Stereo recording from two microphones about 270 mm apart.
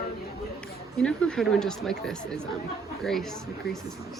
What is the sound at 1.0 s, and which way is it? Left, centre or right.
Speech, centre.